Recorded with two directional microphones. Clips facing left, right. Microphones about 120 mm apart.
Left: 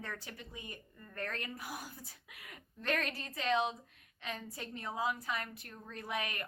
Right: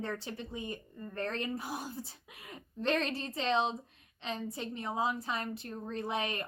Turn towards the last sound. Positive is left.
turn(degrees=-25)  # may be behind; listen again after turning